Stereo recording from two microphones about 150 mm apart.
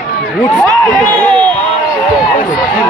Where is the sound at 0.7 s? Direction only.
5° left (ahead or behind).